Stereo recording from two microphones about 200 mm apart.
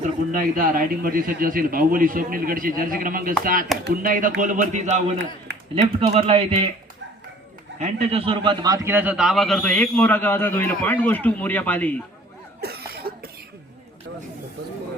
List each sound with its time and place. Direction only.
0.0 s a man's voice: 45° right (ahead or behind)
7.8 s a man's voice: 30° right (ahead or behind); by 12.0 s 5° left (ahead or behind)
12.5 s cough: 50° right (ahead or behind)